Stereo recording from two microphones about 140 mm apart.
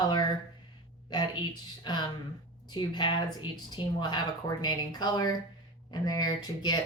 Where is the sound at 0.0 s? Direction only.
30° left (ahead or behind).